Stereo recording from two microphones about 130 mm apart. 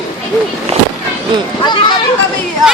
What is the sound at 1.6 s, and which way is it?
Speech, 35° left (ahead or behind).